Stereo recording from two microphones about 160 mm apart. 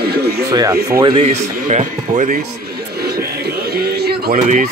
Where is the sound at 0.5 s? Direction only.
20° right (ahead or behind).